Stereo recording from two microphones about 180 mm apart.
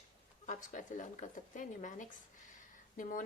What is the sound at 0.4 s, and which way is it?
Speech, 45° left (ahead or behind).